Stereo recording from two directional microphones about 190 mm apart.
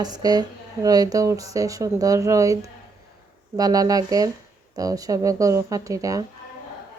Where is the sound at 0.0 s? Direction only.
20° right (ahead or behind).